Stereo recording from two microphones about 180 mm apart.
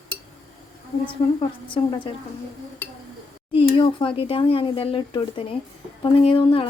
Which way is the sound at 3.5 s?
30° left (ahead or behind).